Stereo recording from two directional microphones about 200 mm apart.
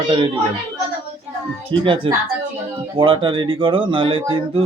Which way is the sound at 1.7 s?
25° right (ahead or behind).